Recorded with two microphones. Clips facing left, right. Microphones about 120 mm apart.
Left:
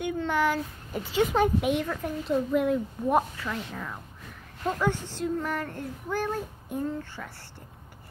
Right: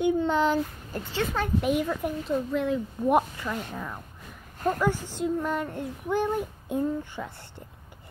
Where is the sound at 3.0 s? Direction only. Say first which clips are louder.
Right 3 dB; 10° right (ahead or behind).